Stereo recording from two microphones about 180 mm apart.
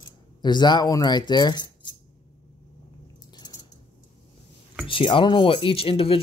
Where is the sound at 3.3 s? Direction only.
20° left (ahead or behind).